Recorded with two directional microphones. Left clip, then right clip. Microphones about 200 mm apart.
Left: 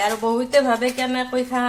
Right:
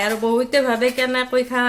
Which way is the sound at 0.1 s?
45° right (ahead or behind).